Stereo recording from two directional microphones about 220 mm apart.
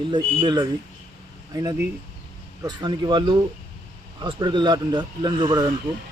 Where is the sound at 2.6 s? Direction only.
20° right (ahead or behind).